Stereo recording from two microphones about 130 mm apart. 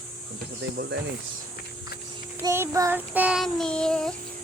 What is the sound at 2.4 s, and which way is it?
Speech, 20° right (ahead or behind).